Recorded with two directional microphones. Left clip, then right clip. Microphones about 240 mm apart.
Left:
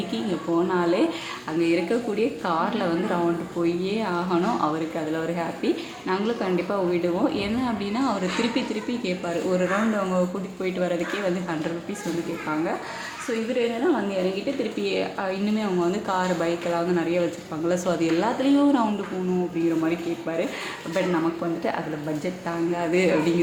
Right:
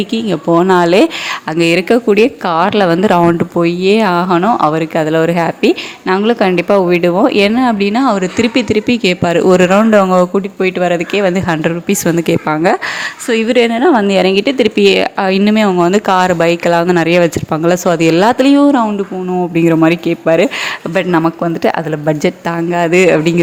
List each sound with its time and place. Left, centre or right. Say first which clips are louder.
0.1 s speech: right 13 dB; right
13.5 s speech: right 14 dB; right
19.6 s speech: right 16 dB; right
22.2 s speech: right 12 dB; right